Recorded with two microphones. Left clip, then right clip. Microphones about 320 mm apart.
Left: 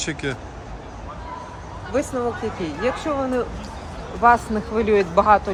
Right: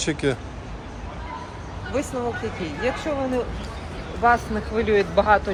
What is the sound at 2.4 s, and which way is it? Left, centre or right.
Speech, left.